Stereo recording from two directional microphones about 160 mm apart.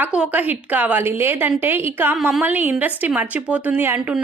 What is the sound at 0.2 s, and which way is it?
A woman's voice, 10° right (ahead or behind).